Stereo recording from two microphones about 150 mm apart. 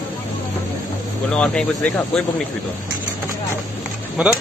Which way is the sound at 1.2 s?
5° left (ahead or behind).